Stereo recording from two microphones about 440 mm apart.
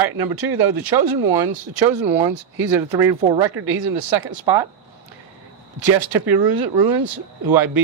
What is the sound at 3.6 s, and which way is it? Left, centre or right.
Speech, right.